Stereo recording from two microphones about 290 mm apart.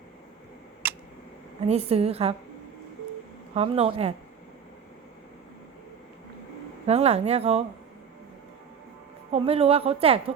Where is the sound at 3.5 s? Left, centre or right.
Centre.